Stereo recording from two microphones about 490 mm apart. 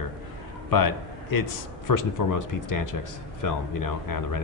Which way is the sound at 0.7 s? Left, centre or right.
Left.